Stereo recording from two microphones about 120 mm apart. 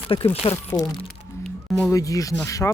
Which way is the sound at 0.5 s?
25° left (ahead or behind).